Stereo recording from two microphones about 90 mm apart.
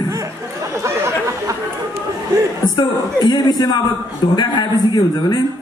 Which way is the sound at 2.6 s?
55° left (ahead or behind).